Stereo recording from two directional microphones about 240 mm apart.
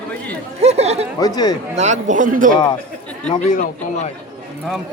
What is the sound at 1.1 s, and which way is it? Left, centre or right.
Speech, centre.